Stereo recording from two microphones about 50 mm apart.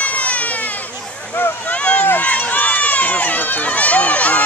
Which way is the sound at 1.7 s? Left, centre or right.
Left.